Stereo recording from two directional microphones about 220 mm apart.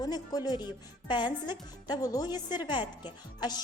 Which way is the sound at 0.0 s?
15° left (ahead or behind).